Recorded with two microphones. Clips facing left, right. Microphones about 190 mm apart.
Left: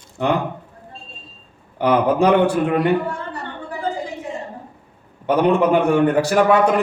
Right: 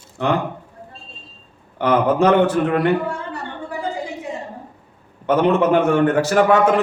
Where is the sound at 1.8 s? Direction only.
15° left (ahead or behind).